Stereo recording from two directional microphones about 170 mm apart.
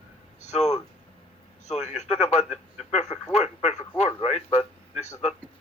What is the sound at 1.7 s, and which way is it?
Radio, 40° left (ahead or behind).